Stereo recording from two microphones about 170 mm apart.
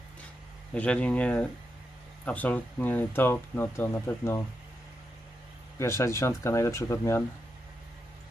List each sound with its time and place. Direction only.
0.7 s speech: 5° left (ahead or behind)
5.8 s speech: 15° left (ahead or behind)